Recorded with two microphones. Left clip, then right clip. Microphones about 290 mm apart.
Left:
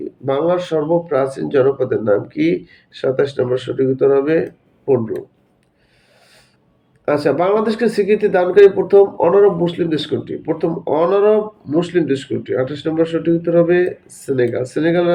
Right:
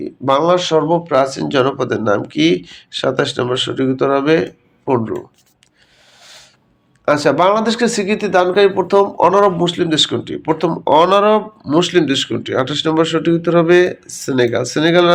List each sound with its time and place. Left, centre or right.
0.3 s speech: centre
6.1 s a sound: centre
7.0 s speech: centre